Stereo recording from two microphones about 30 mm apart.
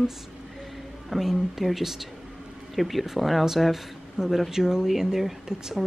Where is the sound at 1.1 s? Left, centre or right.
Centre.